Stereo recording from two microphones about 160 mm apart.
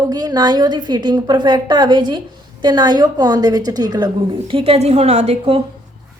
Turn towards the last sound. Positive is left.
turn(degrees=-40)  # may be behind; listen again after turning